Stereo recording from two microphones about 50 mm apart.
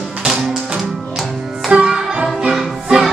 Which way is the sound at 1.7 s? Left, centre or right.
Right.